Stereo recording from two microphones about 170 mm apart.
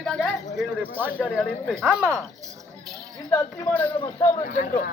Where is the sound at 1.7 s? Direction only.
10° right (ahead or behind).